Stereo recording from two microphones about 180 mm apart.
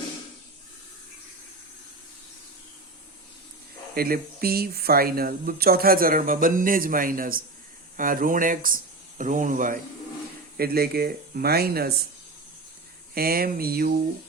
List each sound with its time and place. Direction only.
3.9 s speech: 55° right (ahead or behind)
10.6 s speech: 60° right (ahead or behind)
13.1 s speech: 55° right (ahead or behind)